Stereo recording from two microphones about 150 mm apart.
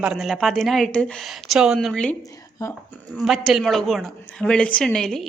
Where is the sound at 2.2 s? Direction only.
20° left (ahead or behind).